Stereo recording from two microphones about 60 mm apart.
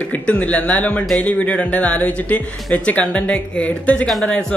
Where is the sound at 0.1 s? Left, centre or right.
Left.